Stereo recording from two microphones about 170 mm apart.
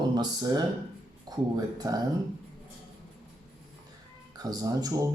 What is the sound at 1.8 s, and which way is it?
Speech, 20° right (ahead or behind).